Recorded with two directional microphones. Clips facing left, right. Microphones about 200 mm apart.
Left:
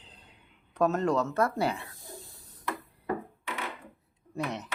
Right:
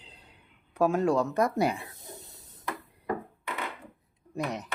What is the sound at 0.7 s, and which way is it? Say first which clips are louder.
Snake: right 2 dB; 10° right (ahead or behind).